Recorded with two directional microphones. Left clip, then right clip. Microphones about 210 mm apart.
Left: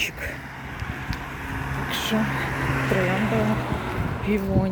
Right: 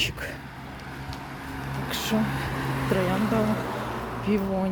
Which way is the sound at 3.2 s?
50° right (ahead or behind).